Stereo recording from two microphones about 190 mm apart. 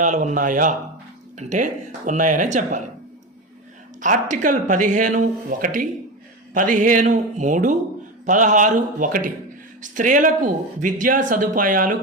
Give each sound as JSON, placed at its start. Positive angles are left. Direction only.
{"t": 0.0, "sound": "speech", "side_deg": -40}
{"t": 4.0, "sound": "speech", "side_deg": -40}